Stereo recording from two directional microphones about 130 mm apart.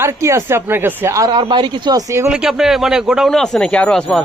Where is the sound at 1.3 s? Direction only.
35° right (ahead or behind).